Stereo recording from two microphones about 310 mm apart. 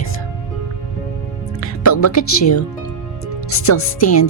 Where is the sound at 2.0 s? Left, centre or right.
Left.